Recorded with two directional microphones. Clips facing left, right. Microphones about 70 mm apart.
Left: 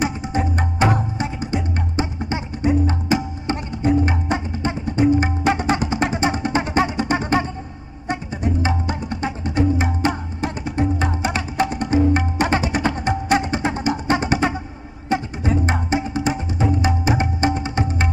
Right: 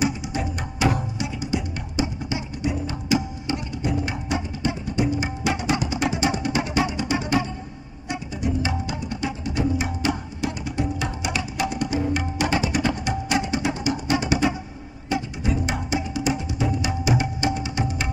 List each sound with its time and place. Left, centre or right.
0.0 s music: left